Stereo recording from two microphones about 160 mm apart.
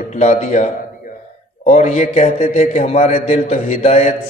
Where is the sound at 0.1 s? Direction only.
45° left (ahead or behind).